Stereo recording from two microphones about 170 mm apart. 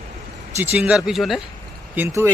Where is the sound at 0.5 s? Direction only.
10° right (ahead or behind).